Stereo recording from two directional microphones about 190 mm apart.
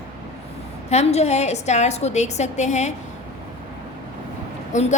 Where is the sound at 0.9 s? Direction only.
35° left (ahead or behind).